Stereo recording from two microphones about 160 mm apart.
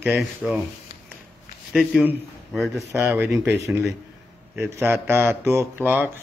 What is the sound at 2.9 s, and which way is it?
Speech, 15° right (ahead or behind).